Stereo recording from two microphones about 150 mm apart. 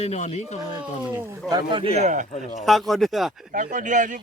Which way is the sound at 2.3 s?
55° left (ahead or behind).